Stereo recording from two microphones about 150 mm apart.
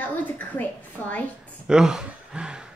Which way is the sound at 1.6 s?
5° right (ahead or behind).